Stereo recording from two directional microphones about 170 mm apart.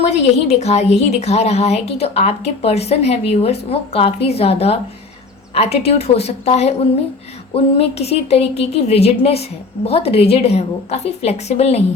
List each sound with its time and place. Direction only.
0.0 s a woman's voice: 40° left (ahead or behind)